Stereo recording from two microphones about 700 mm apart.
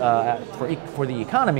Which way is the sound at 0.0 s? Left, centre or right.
Right.